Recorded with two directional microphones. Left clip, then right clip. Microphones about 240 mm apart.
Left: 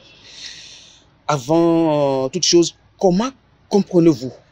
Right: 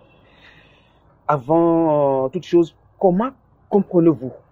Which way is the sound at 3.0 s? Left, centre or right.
Left.